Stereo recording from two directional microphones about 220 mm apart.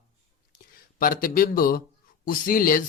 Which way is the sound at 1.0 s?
40° left (ahead or behind).